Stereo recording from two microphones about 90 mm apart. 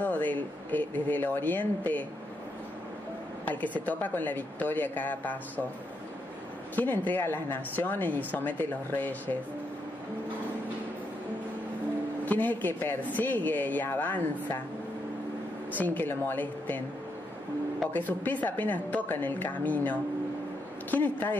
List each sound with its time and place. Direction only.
0.0 s speech: 20° left (ahead or behind)
3.4 s speech: 15° left (ahead or behind)
6.7 s speech: 20° left (ahead or behind)
12.3 s speech: 20° left (ahead or behind)
15.7 s speech: 20° left (ahead or behind)
17.9 s speech: 20° left (ahead or behind)